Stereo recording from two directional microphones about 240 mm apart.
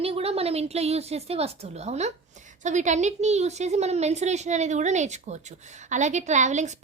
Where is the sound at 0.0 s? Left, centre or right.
Right.